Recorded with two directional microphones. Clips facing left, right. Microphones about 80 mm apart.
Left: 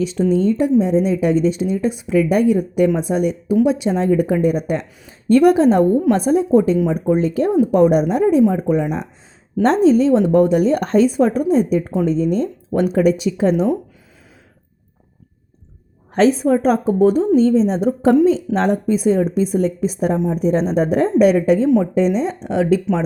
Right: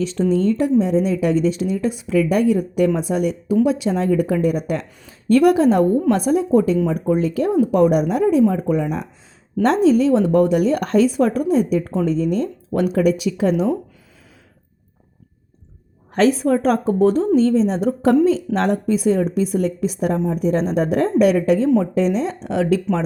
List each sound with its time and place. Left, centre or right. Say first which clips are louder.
0.0 s speech: left 2 dB; centre
16.1 s speech: left 2 dB; left